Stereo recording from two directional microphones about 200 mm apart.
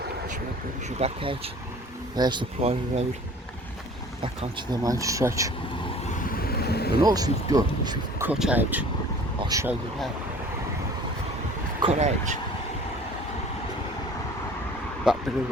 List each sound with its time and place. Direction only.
0.9 s speech: 30° right (ahead or behind)
4.2 s speech: 20° right (ahead or behind)
6.2 s vehicle: 50° left (ahead or behind)
7.0 s speech: 20° right (ahead or behind)
8.3 s speech: 5° right (ahead or behind)
11.8 s speech: 30° right (ahead or behind)
15.1 s speech: 5° right (ahead or behind)